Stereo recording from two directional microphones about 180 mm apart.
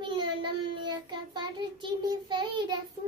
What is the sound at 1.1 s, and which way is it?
Child singing, 25° right (ahead or behind).